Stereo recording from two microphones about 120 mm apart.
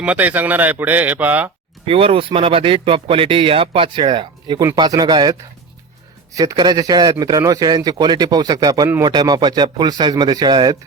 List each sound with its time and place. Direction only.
0.0 s a man's voice: 10° right (ahead or behind)
1.9 s speech: 50° right (ahead or behind)